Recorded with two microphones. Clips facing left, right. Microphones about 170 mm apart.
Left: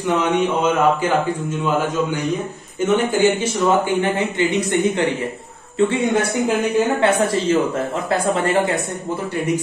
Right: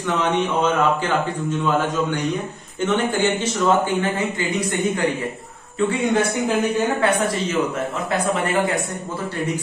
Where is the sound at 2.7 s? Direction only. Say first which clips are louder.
Left 3 dB; 10° left (ahead or behind).